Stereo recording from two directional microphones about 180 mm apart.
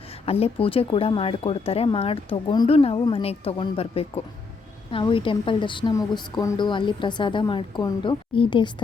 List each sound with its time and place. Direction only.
0.3 s a woman's voice: 35° left (ahead or behind)